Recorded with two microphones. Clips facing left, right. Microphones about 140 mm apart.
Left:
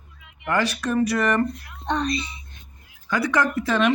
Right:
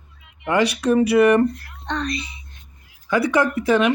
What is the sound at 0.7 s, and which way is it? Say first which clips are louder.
Speech: right 6 dB; 15° right (ahead or behind).